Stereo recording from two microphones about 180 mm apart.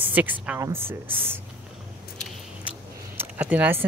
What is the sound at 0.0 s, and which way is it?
Speech, 10° right (ahead or behind).